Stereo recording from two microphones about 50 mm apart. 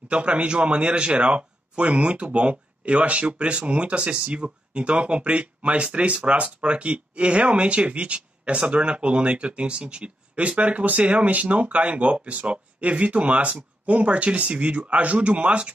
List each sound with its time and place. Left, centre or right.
0.1 s speech: right